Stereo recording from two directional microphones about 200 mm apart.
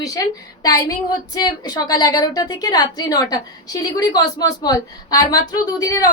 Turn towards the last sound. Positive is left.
turn(degrees=20)  # may be behind; listen again after turning